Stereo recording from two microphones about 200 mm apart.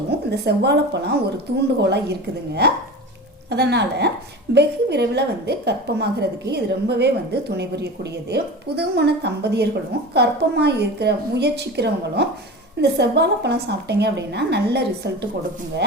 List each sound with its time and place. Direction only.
0.3 s a woman's voice: 55° right (ahead or behind)